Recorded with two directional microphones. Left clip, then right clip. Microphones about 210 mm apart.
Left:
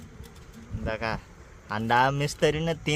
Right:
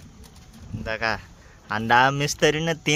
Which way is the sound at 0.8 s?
5° right (ahead or behind).